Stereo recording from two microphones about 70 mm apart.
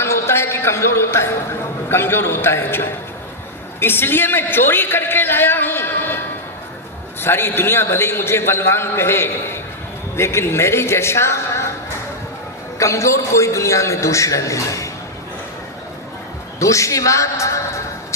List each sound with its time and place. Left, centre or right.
0.0 s a sound: left
1.9 s a man's voice: left
7.2 s a man's voice: left
12.8 s a man's voice: left
16.6 s a man's voice: left